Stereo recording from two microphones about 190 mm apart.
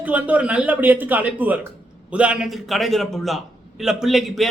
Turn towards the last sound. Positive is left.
turn(degrees=0)  # may be behind; listen again after turning